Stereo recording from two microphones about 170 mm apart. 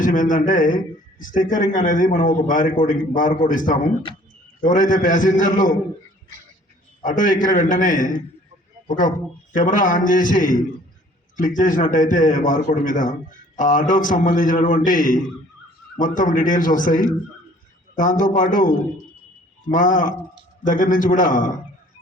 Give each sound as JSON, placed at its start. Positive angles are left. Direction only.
{"t": 0.0, "sound": "a man's voice", "side_deg": 50}
{"t": 7.0, "sound": "a man's voice", "side_deg": 50}